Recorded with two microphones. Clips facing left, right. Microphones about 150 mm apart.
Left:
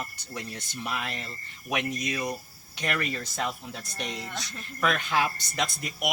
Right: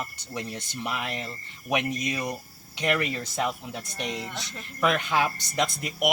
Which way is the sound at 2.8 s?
15° right (ahead or behind).